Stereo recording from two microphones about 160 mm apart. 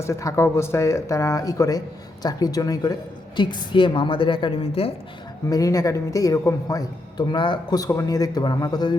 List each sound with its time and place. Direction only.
0.0 s a woman's voice: 20° left (ahead or behind); by 4.9 s 35° left (ahead or behind)
5.5 s speech: 20° left (ahead or behind)